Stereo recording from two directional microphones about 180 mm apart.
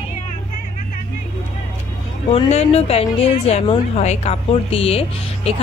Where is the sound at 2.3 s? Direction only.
35° left (ahead or behind).